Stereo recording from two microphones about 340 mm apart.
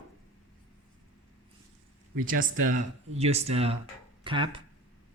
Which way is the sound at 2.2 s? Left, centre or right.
Right.